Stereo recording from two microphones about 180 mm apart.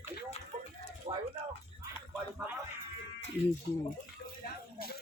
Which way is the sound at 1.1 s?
35° right (ahead or behind).